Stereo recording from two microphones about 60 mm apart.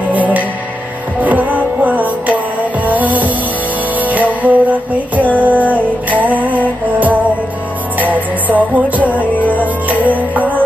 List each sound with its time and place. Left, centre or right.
0.1 s music: right
9.2 s music: left
9.8 s music: right